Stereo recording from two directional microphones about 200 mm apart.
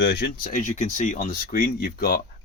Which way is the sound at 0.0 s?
55° left (ahead or behind).